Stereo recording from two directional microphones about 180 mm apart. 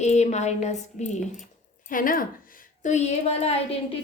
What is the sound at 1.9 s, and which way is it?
Speech, 50° left (ahead or behind).